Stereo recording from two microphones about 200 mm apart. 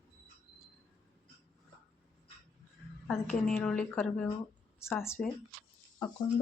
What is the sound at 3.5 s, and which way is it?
A woman's voice, 10° left (ahead or behind).